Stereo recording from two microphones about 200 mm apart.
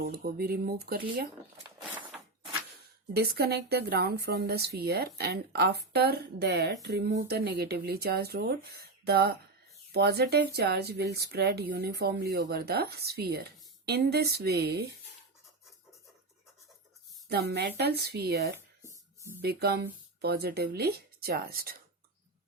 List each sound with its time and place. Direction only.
0.0 s speech: 50° right (ahead or behind)
3.1 s speech: 50° right (ahead or behind)
17.2 s speech: 55° right (ahead or behind)
18.8 s a sound: 15° right (ahead or behind)
19.4 s speech: 55° right (ahead or behind)